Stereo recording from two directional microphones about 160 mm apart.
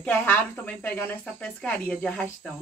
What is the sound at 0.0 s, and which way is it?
Speech, 10° left (ahead or behind).